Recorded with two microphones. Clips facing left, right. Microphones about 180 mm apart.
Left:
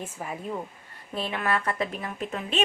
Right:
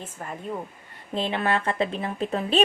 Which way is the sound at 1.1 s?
25° right (ahead or behind).